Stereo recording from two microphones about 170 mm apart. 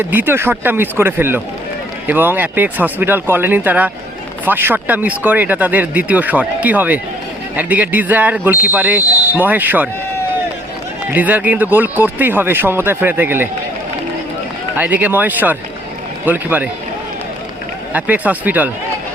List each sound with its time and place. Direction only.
0.0 s speech: 10° right (ahead or behind)
11.1 s speech: 10° right (ahead or behind)
14.8 s speech: 10° right (ahead or behind)
17.9 s speech: 10° right (ahead or behind)